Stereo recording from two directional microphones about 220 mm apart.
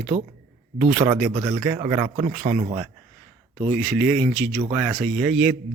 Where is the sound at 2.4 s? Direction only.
30° right (ahead or behind).